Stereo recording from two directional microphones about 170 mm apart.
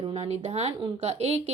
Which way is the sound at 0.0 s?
35° right (ahead or behind).